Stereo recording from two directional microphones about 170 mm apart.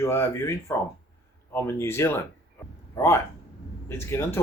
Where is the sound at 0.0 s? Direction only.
15° left (ahead or behind).